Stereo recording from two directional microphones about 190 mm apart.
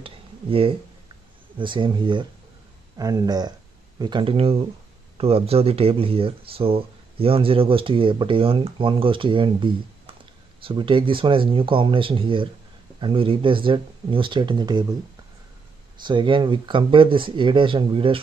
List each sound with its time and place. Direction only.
0.0 s a sound: 30° right (ahead or behind)
1.6 s speech: 25° right (ahead or behind)
16.0 s speech: 25° right (ahead or behind)